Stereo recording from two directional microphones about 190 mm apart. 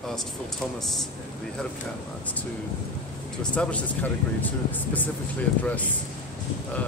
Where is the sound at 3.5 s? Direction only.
5° left (ahead or behind).